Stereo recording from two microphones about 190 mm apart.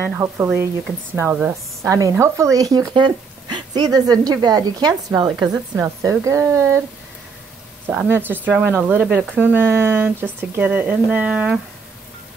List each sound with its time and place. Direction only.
0.1 s speech: 15° right (ahead or behind)
7.8 s speech: 10° right (ahead or behind)